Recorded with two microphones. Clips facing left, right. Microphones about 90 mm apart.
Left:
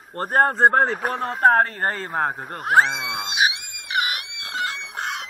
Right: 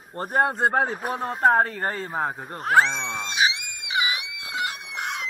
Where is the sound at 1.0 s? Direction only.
55° left (ahead or behind).